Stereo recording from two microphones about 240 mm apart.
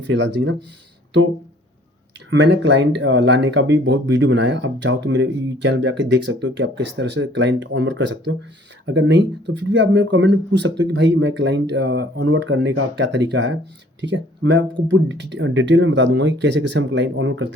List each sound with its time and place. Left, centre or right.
0.1 s speech: right
2.3 s speech: right